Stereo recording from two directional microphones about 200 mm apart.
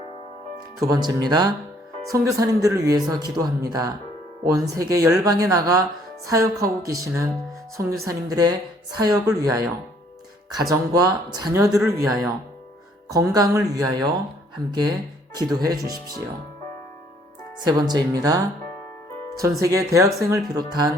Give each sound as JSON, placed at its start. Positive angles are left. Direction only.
{"t": 0.8, "sound": "a woman's voice", "side_deg": -20}
{"t": 12.0, "sound": "speech", "side_deg": 0}
{"t": 13.1, "sound": "a woman's voice", "side_deg": -15}
{"t": 17.7, "sound": "a woman's voice", "side_deg": -20}
{"t": 19.6, "sound": "a woman's voice", "side_deg": -15}